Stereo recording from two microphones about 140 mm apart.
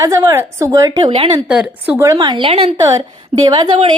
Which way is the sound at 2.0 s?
25° right (ahead or behind).